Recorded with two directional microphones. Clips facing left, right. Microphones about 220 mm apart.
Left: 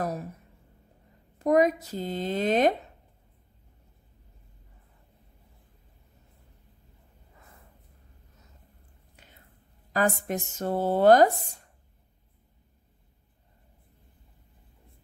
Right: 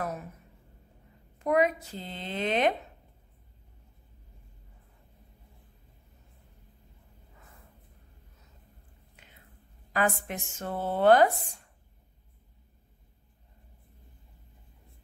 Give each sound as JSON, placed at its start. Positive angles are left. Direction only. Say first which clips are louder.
{"t": 0.0, "sound": "a sound", "louder": "left 4 dB", "side_deg": 35}
{"t": 1.4, "sound": "speech", "louder": "left 4 dB", "side_deg": 40}
{"t": 9.9, "sound": "speech", "louder": "left 3 dB", "side_deg": 40}